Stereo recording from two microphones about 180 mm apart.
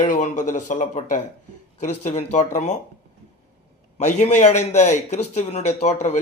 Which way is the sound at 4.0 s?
40° left (ahead or behind).